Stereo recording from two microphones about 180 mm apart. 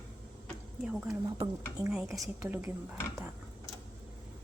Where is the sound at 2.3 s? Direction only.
10° right (ahead or behind).